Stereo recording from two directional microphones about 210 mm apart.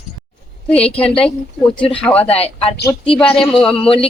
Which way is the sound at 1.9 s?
5° left (ahead or behind).